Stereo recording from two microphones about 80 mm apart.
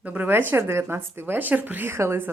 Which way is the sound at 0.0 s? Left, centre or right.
Right.